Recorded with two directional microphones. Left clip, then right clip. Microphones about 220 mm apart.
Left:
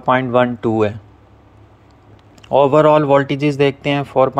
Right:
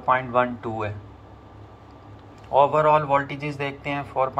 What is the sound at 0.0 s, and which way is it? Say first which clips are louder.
Speech: left 6 dB; 35° left (ahead or behind).